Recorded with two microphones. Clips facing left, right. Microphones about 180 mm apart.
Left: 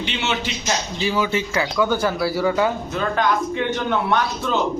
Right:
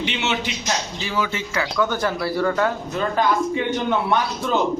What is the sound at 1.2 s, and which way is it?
Speech, 25° left (ahead or behind).